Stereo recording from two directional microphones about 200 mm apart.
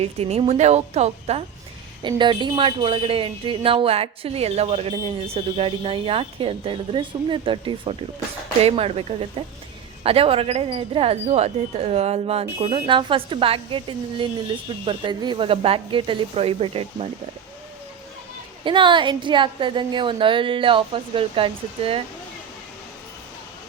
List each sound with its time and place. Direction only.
0.0 s speech: 30° right (ahead or behind)
18.6 s speech: 25° right (ahead or behind)